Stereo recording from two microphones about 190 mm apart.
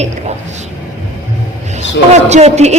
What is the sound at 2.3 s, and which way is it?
Speech, 35° right (ahead or behind).